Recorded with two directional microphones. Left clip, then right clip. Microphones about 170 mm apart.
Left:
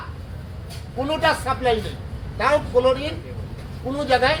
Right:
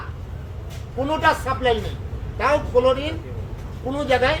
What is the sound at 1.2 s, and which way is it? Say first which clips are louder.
Speech: right 1 dB; 5° right (ahead or behind).